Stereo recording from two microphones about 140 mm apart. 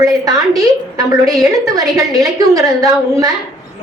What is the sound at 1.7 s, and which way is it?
A woman's voice, 25° right (ahead or behind).